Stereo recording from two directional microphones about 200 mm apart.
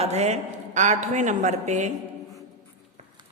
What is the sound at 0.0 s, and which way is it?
A man's voice, 35° right (ahead or behind).